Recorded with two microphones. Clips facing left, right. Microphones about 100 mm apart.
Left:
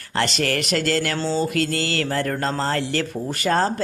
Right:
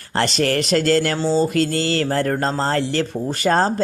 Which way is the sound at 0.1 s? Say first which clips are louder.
Right 3 dB; 35° right (ahead or behind).